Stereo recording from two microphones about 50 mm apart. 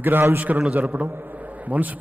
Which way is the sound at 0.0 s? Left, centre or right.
Right.